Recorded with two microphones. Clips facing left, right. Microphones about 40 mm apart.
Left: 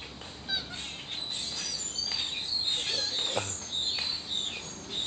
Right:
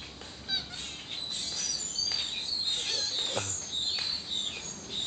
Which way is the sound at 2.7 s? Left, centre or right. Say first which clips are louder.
Left 1 dB; centre.